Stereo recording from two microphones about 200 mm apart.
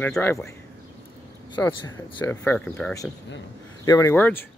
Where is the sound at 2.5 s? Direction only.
5° left (ahead or behind).